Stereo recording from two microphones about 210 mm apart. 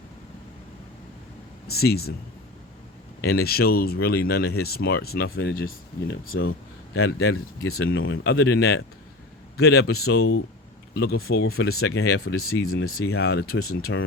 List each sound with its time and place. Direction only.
1.6 s speech: 50° left (ahead or behind)
3.2 s speech: 50° left (ahead or behind)
6.9 s speech: 75° left (ahead or behind); by 8.8 s 60° left (ahead or behind)
9.9 s speech: 90° left
10.9 s speech: 50° left (ahead or behind)
11.4 s speech: 80° left